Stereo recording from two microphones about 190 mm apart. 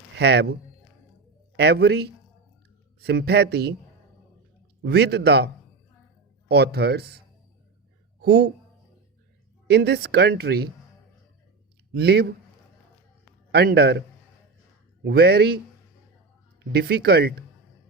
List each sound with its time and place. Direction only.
0.2 s speech: 60° right (ahead or behind)
1.5 s speech: 60° right (ahead or behind)
4.8 s speech: 60° right (ahead or behind)
6.5 s speech: 60° right (ahead or behind)
8.2 s speech: 55° right (ahead or behind)
9.6 s speech: 60° right (ahead or behind)
11.9 s speech: 55° right (ahead or behind)
13.5 s speech: 60° right (ahead or behind)
15.0 s speech: 55° right (ahead or behind)
16.7 s speech: 55° right (ahead or behind)